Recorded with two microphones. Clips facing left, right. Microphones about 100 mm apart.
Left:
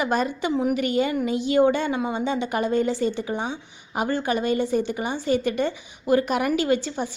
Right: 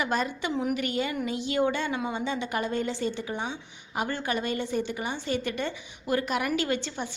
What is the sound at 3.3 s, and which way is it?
Speech, 15° left (ahead or behind).